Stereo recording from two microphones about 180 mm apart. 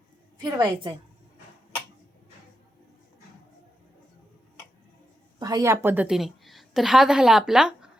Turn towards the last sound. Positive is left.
turn(degrees=-5)  # may be behind; listen again after turning